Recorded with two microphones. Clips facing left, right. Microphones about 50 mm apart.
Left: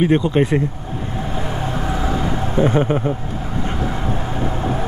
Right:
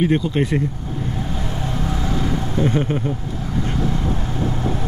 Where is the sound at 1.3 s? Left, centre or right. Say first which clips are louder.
Left 3 dB; left.